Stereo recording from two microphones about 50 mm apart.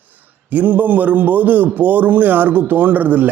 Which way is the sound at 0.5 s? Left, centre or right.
Right.